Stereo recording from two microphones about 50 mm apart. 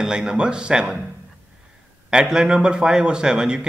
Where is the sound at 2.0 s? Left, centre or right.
Centre.